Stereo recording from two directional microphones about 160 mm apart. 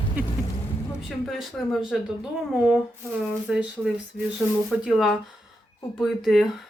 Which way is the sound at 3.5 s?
5° right (ahead or behind).